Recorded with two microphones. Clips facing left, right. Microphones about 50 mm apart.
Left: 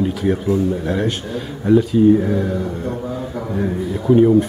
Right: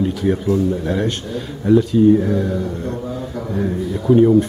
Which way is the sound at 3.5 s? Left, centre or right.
Centre.